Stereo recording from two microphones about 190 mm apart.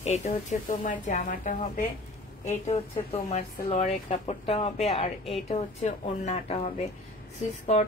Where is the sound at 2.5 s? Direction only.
30° left (ahead or behind).